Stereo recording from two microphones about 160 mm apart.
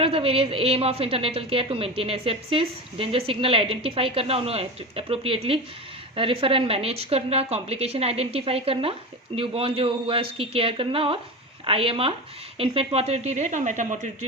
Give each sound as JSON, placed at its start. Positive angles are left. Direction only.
{"t": 0.0, "sound": "a woman's voice", "side_deg": -35}